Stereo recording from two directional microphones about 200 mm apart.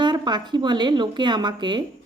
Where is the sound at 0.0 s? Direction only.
20° right (ahead or behind).